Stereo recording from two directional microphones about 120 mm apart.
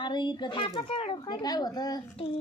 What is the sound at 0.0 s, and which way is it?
A child's voice, 40° left (ahead or behind).